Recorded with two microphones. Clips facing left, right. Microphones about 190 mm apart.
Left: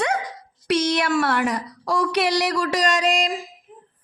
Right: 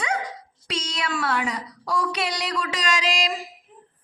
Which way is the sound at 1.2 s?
75° left (ahead or behind).